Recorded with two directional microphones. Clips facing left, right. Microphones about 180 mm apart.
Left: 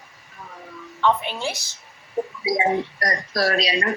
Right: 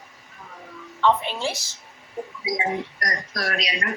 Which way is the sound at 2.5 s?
30° left (ahead or behind).